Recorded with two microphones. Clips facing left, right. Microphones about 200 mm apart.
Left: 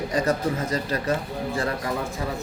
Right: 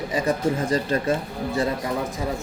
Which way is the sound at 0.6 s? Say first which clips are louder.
Right 4 dB; 30° right (ahead or behind).